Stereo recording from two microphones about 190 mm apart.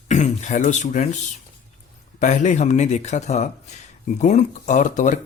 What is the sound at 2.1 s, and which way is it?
A man's voice, 40° left (ahead or behind).